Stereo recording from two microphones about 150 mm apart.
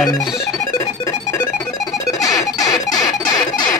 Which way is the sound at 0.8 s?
20° left (ahead or behind).